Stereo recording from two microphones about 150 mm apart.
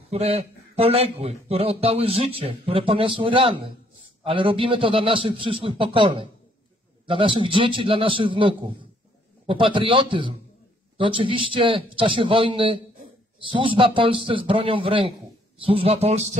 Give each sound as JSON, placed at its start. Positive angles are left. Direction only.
{"t": 0.1, "sound": "a man's voice", "side_deg": -45}